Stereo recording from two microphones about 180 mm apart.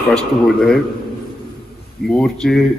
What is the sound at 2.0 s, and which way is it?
Speech, 5° left (ahead or behind).